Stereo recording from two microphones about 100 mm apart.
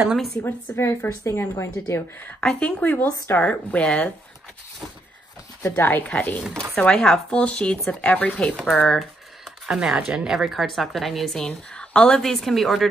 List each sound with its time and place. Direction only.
0.4 s a woman's voice: 25° left (ahead or behind)
3.4 s speech: 10° left (ahead or behind)
5.6 s speech: 20° left (ahead or behind)
8.7 s a sound: 10° left (ahead or behind)
9.7 s a woman's voice: 5° right (ahead or behind)